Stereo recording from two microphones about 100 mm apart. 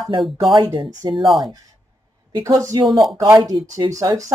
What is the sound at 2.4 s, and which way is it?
Speech, 35° right (ahead or behind).